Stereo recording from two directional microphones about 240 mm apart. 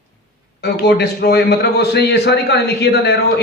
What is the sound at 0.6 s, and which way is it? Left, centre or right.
A man's voice, left.